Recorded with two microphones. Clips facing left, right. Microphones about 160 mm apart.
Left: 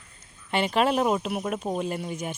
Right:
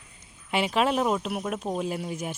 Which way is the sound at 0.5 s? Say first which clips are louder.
Left 1 dB; centre (ahead or behind).